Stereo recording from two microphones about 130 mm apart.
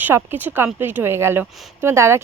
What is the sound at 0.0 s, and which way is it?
A woman's voice, 15° right (ahead or behind).